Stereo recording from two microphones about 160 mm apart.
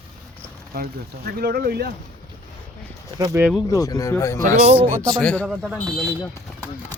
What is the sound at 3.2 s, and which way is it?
Speech, 25° right (ahead or behind).